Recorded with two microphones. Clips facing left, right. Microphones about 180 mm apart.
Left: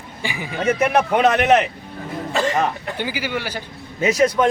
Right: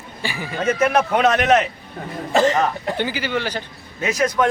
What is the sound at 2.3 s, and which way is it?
Speech, 40° right (ahead or behind).